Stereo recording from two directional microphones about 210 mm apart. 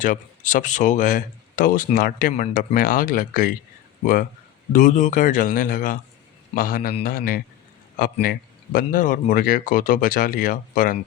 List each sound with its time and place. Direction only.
0.0 s a man's voice: 40° left (ahead or behind)